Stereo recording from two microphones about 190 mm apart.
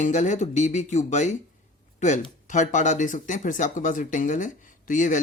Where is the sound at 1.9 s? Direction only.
40° left (ahead or behind).